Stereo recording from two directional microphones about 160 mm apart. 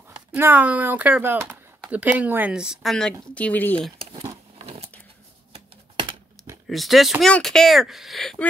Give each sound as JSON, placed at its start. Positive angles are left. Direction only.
{"t": 0.3, "sound": "speech", "side_deg": -10}
{"t": 4.0, "sound": "a sound", "side_deg": -25}
{"t": 5.5, "sound": "typing", "side_deg": -30}
{"t": 6.7, "sound": "speech", "side_deg": 0}